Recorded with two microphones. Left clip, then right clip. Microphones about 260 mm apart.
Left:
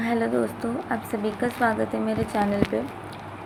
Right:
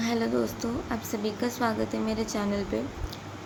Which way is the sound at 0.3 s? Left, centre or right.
Centre.